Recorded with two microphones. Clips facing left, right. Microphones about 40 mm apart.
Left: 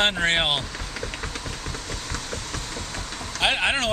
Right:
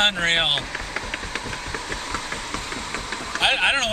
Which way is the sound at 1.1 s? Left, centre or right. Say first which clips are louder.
Right 4 dB; right.